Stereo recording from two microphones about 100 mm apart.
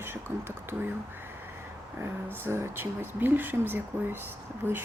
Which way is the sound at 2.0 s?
25° right (ahead or behind).